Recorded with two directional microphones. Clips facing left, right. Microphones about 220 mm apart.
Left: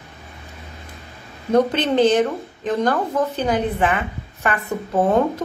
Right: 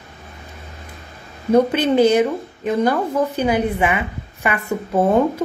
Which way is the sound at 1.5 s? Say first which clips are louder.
Right 2 dB; 10° right (ahead or behind).